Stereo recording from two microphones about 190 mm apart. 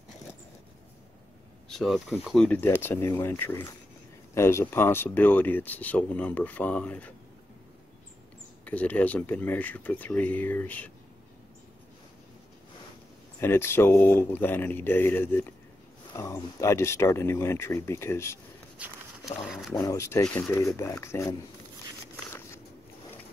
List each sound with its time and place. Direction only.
1.7 s speech: centre (ahead or behind)
8.6 s speech: 10° left (ahead or behind)
13.4 s speech: 15° left (ahead or behind)
19.4 s speech: centre (ahead or behind)
19.8 s speech: 15° left (ahead or behind)